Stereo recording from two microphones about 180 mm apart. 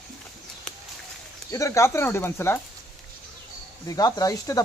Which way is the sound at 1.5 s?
15° left (ahead or behind).